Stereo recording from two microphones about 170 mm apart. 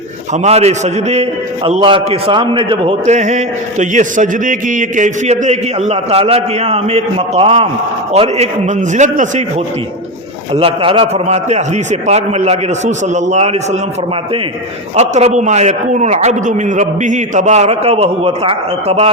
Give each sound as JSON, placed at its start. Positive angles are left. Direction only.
{"t": 0.4, "sound": "a man's voice", "side_deg": -40}
{"t": 10.5, "sound": "a man's voice", "side_deg": -35}
{"t": 14.9, "sound": "a man's voice", "side_deg": -40}